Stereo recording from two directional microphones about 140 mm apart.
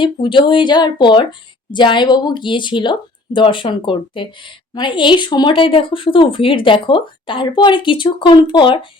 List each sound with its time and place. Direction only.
0.0 s speech: 35° left (ahead or behind)